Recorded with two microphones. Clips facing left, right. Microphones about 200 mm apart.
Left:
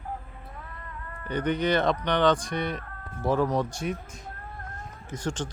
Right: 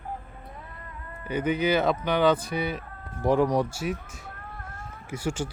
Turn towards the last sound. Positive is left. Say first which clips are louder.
# right 2 dB
turn(degrees=-10)  # may be behind; listen again after turning